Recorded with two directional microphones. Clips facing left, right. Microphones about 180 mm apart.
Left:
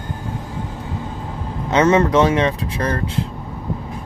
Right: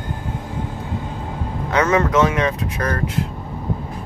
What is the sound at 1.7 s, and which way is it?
Speech, 25° left (ahead or behind).